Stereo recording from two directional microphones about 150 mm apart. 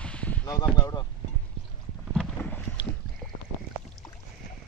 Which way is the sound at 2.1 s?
5° left (ahead or behind).